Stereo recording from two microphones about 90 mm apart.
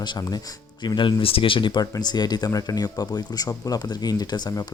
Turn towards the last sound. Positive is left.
turn(degrees=50)  # may be behind; listen again after turning